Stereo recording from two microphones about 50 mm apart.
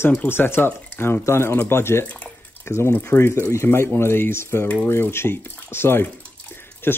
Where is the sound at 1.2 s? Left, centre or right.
Left.